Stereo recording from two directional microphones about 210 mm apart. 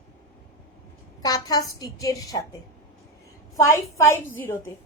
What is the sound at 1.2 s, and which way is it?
A woman's voice, 20° left (ahead or behind).